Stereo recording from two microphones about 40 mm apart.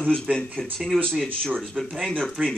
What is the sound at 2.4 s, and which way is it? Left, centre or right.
Speech, centre.